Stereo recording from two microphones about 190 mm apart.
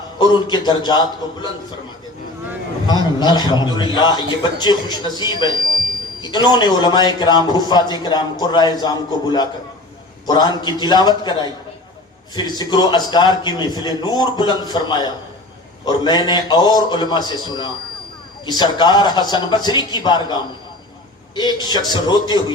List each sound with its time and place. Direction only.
0.2 s a man's voice: 25° left (ahead or behind)
2.8 s a man's voice: 20° left (ahead or behind)